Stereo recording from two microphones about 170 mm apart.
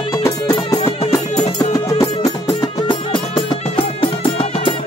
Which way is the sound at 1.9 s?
20° left (ahead or behind).